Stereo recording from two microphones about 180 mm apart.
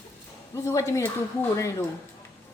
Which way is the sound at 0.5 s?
15° left (ahead or behind).